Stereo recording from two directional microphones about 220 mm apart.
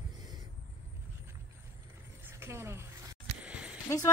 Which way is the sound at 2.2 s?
10° right (ahead or behind).